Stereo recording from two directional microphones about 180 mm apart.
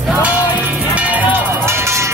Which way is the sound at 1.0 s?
10° right (ahead or behind).